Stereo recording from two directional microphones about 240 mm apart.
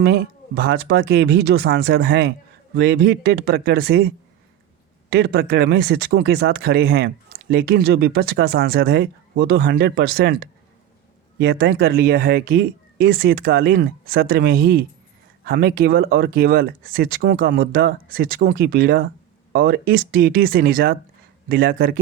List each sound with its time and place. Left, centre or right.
0.0 s speech: right